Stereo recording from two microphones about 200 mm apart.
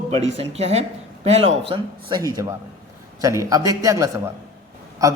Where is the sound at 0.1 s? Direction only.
30° right (ahead or behind).